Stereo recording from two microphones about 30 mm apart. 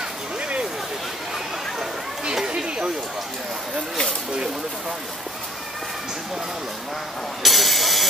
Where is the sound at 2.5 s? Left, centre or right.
Right.